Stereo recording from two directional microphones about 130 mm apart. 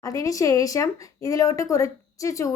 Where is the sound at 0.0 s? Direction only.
25° left (ahead or behind).